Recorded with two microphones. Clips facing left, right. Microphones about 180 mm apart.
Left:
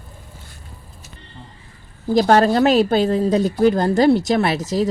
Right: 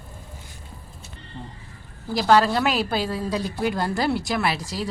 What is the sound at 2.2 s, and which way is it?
Speech, 45° left (ahead or behind).